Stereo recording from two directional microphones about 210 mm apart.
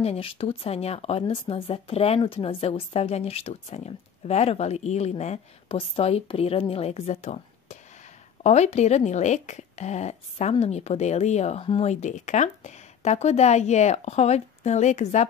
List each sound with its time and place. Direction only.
0.0 s speech: 25° left (ahead or behind)